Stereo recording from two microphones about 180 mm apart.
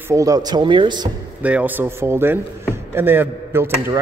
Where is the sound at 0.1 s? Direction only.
20° right (ahead or behind).